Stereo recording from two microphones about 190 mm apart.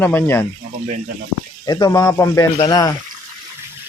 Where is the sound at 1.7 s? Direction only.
20° left (ahead or behind).